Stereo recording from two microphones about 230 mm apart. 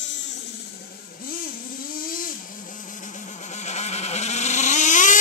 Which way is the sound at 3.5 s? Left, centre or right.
Left.